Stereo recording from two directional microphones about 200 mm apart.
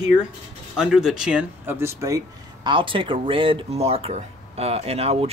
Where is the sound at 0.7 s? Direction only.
5° right (ahead or behind).